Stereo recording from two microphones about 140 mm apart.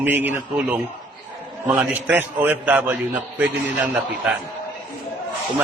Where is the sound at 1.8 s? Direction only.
10° right (ahead or behind).